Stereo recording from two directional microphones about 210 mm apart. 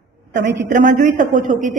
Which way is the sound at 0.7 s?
35° right (ahead or behind).